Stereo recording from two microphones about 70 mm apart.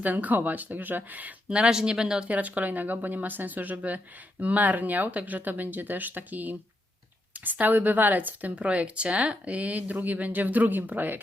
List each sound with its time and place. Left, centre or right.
0.0 s speech: right